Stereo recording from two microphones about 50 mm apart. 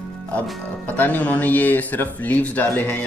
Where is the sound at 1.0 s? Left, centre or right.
Left.